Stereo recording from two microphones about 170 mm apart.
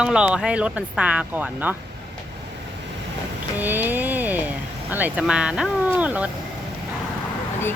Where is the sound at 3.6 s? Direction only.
10° right (ahead or behind).